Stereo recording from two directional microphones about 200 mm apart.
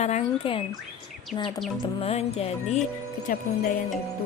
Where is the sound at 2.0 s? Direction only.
30° left (ahead or behind).